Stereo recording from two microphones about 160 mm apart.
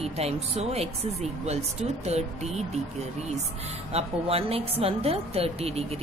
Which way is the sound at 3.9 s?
40° right (ahead or behind).